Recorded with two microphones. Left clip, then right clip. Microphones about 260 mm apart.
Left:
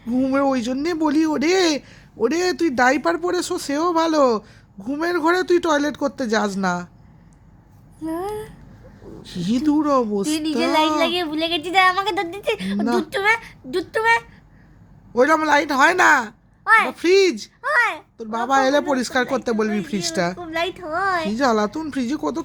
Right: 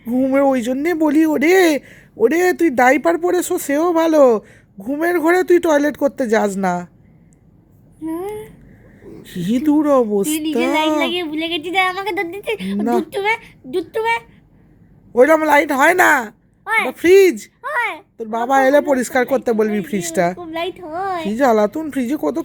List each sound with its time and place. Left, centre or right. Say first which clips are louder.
0.1 s speech: right 4 dB; centre
8.0 s a sound: right 1 dB; centre
9.2 s speech: right 3 dB; centre
10.2 s speech: right 3 dB; centre
15.1 s speech: right 5 dB; centre
16.6 s speech: left 3 dB; centre
17.0 s speech: right 5 dB; centre
17.6 s a child's voice: left 5 dB; centre
18.2 s speech: right 4 dB; centre
20.4 s speech: even; centre
21.2 s speech: right 5 dB; centre